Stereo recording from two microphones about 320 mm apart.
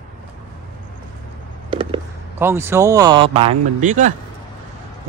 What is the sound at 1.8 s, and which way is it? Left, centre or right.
Speech, centre.